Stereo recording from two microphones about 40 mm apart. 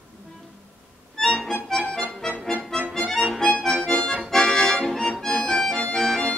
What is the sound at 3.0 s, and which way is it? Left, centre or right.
Music, centre.